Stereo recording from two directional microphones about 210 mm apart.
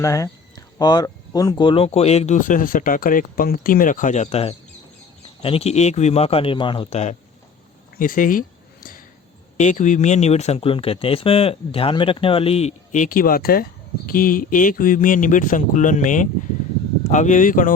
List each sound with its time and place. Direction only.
0.0 s speech: 15° left (ahead or behind); by 7.2 s 30° left (ahead or behind)
7.9 s a sound: 40° left (ahead or behind)
9.6 s speech: 35° left (ahead or behind)